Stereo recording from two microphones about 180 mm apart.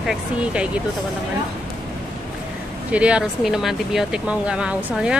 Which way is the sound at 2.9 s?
5° right (ahead or behind).